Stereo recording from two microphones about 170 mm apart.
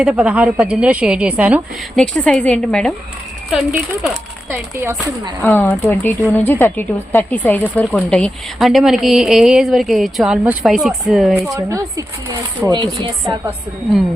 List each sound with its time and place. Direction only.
0.0 s a woman's voice: 5° right (ahead or behind)
2.0 s speech: 5° left (ahead or behind)
3.5 s a woman's voice: 10° right (ahead or behind)
5.4 s a woman's voice: 10° left (ahead or behind)
11.3 s a woman's voice: 20° right (ahead or behind)